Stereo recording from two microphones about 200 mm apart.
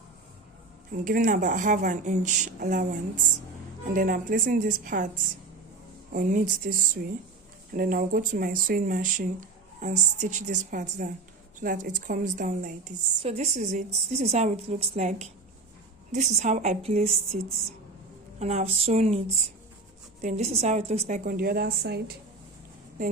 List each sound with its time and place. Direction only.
0.9 s a woman's voice: 45° right (ahead or behind)
6.1 s a woman's voice: 40° right (ahead or behind)
18.3 s a woman's voice: 35° right (ahead or behind)
20.2 s a woman's voice: 35° right (ahead or behind)
21.2 s speech: 50° right (ahead or behind)